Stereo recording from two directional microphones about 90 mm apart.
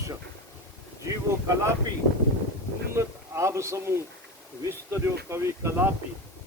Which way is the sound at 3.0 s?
30° right (ahead or behind).